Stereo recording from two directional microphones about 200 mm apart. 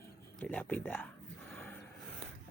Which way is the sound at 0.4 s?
5° left (ahead or behind).